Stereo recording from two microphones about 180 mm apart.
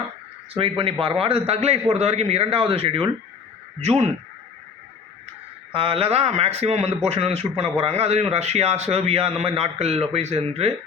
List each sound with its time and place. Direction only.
0.5 s speech: 30° right (ahead or behind)
5.7 s speech: 30° right (ahead or behind)